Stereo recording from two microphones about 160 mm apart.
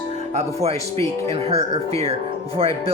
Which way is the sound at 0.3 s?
40° right (ahead or behind).